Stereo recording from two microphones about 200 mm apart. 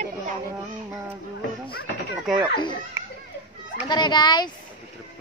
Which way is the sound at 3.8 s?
20° left (ahead or behind).